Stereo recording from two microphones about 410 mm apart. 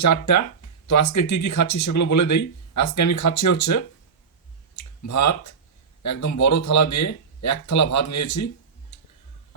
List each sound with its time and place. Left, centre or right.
0.0 s speech: left
4.7 s a sound: left
6.0 s speech: left